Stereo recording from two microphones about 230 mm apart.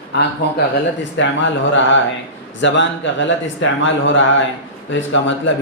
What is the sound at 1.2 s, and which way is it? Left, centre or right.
Speech, left.